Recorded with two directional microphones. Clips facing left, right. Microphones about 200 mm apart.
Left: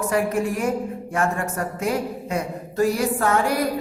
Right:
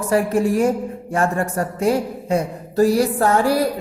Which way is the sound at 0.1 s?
30° right (ahead or behind).